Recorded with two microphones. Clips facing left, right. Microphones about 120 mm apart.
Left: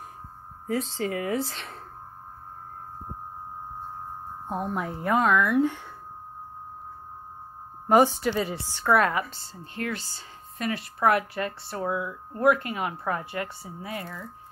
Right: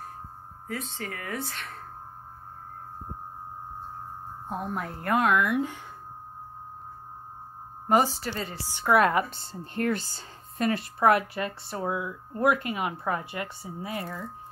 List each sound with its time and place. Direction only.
0.7 s speech: 25° left (ahead or behind)
4.5 s speech: 5° left (ahead or behind)
5.1 s speech: 10° right (ahead or behind)
8.0 s speech: 5° right (ahead or behind)
8.7 s a woman's voice: 15° right (ahead or behind)
9.3 s a woman's voice: 55° right (ahead or behind)
11.0 s speech: 25° right (ahead or behind)
14.0 s speech: centre (ahead or behind)